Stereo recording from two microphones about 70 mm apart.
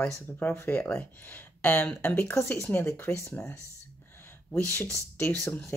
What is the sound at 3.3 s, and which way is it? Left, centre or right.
Speech, centre.